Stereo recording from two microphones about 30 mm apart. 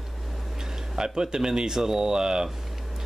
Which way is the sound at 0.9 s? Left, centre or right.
Right.